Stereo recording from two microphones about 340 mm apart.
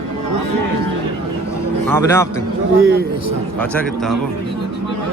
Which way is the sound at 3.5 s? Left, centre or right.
Centre.